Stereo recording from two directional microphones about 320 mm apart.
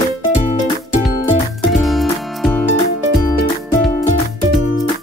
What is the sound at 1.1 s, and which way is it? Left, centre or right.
Music, centre.